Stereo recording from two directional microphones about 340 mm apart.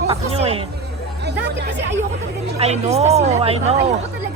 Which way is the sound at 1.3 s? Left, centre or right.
Right.